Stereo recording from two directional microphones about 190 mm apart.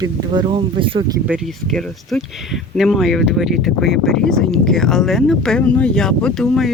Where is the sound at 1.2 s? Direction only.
5° right (ahead or behind).